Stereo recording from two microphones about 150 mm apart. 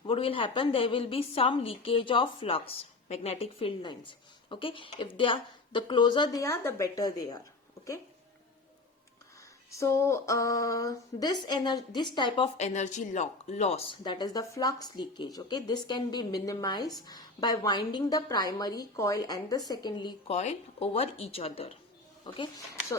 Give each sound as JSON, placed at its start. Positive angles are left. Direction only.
{"t": 0.0, "sound": "a woman's voice", "side_deg": 35}
{"t": 9.7, "sound": "speech", "side_deg": 20}
{"t": 12.5, "sound": "speech", "side_deg": 50}
{"t": 20.3, "sound": "a woman's voice", "side_deg": 45}